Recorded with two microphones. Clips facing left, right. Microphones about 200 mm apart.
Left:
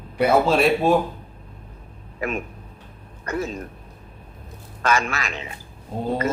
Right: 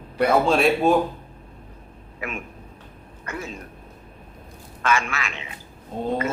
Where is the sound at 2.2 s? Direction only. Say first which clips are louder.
Left 6 dB; 40° left (ahead or behind).